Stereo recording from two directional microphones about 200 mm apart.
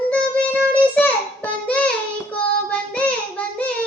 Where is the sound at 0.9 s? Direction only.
10° left (ahead or behind).